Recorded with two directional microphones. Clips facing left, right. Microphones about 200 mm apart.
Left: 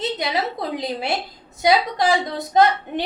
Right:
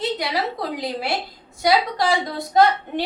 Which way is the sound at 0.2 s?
20° left (ahead or behind).